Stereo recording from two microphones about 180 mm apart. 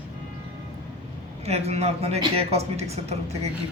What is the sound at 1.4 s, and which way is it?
Speech, 35° right (ahead or behind).